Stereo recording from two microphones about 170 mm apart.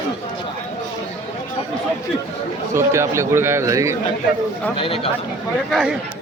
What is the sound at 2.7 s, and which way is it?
A man's voice, 15° right (ahead or behind).